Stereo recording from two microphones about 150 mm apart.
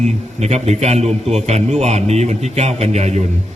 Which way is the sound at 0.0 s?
50° right (ahead or behind).